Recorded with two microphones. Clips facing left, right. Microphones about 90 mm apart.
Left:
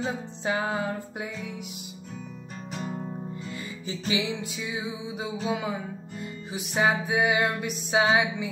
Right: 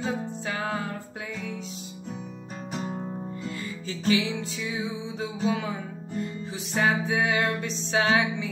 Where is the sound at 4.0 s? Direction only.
20° left (ahead or behind).